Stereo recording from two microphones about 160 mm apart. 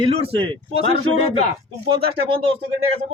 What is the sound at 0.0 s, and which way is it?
Speech, 30° right (ahead or behind).